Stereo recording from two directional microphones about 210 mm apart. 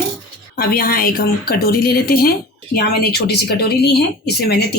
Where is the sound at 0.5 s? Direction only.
45° left (ahead or behind).